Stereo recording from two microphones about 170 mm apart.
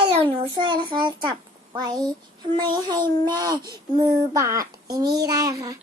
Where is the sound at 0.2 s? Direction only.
30° right (ahead or behind).